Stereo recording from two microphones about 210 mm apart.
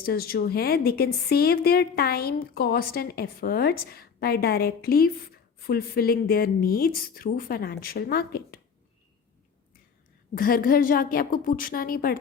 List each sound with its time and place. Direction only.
0.0 s speech: 45° left (ahead or behind)
10.3 s speech: 45° left (ahead or behind)